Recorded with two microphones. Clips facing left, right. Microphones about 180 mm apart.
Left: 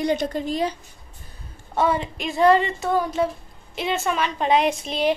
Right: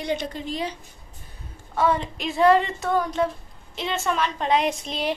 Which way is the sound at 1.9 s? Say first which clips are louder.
Left 1 dB; 5° left (ahead or behind).